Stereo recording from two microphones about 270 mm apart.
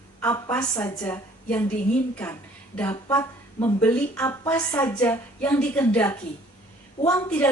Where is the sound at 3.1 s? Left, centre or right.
Centre.